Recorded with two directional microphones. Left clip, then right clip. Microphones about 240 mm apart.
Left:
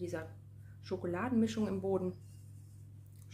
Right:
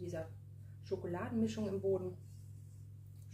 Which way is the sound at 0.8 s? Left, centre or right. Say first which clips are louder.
Left 3 dB; left.